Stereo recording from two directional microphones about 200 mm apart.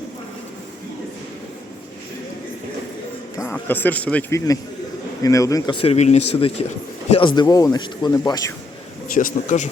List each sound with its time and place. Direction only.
3.3 s speech: 10° left (ahead or behind)
9.1 s speech: 40° left (ahead or behind)